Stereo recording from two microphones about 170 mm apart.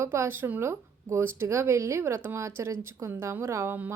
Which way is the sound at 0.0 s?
15° right (ahead or behind).